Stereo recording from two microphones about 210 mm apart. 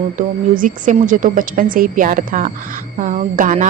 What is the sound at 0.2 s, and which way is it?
A woman's voice, 40° right (ahead or behind).